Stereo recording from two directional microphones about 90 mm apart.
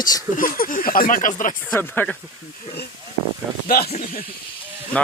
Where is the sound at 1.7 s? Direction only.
25° left (ahead or behind).